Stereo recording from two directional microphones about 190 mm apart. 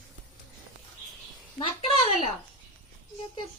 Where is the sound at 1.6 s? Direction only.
30° left (ahead or behind).